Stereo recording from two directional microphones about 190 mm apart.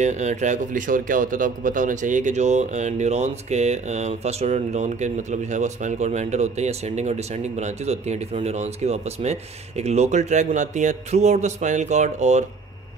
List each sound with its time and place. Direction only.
0.0 s speech: 40° right (ahead or behind)